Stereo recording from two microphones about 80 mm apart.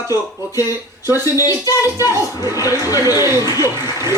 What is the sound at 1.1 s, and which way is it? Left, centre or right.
Speech, left.